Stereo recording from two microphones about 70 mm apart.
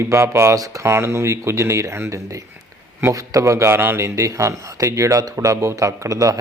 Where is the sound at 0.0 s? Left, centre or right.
Right.